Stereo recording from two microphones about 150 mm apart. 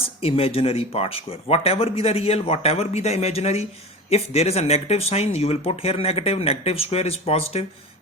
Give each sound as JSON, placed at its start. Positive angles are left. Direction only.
{"t": 0.0, "sound": "speech", "side_deg": 40}